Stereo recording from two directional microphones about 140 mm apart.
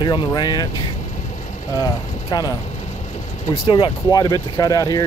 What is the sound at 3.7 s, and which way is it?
Speech, 30° left (ahead or behind).